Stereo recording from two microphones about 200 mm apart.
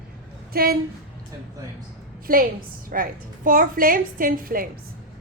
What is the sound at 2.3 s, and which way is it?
Speech, 45° right (ahead or behind).